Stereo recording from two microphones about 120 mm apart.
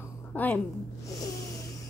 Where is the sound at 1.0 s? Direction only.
25° left (ahead or behind).